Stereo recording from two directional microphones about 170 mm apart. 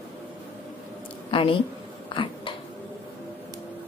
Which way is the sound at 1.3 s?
30° left (ahead or behind).